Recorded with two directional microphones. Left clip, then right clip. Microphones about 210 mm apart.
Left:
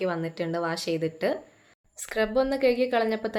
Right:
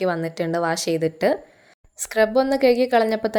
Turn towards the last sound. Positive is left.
turn(degrees=-35)  # may be behind; listen again after turning